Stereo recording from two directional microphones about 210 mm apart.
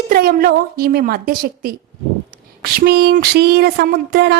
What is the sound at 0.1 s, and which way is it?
Speech, 45° right (ahead or behind).